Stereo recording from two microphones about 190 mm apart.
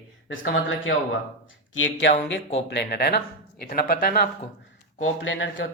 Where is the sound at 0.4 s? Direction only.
55° left (ahead or behind).